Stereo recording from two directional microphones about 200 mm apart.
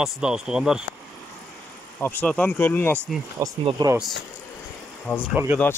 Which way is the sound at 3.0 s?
10° right (ahead or behind).